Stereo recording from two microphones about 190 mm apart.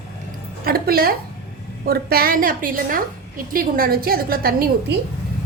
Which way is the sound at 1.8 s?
55° right (ahead or behind).